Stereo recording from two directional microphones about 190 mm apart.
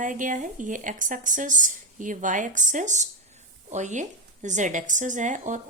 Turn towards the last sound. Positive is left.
turn(degrees=-40)  # may be behind; listen again after turning